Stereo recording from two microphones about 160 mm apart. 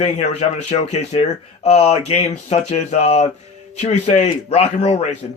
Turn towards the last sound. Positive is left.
turn(degrees=40)  # may be behind; listen again after turning